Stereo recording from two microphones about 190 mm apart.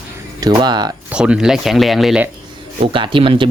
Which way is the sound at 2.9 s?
25° right (ahead or behind).